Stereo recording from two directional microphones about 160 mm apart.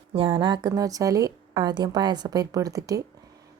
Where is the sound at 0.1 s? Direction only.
35° right (ahead or behind).